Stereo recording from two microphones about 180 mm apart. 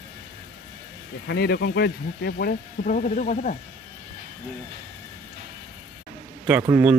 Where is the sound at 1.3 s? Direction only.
65° left (ahead or behind); by 3.5 s 45° left (ahead or behind).